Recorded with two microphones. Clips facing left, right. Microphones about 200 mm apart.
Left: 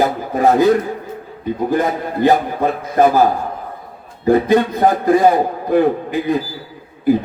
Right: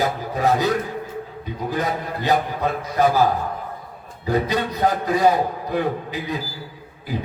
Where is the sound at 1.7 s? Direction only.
50° left (ahead or behind).